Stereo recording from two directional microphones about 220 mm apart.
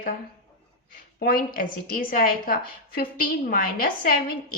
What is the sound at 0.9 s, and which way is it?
A woman's voice, 40° left (ahead or behind).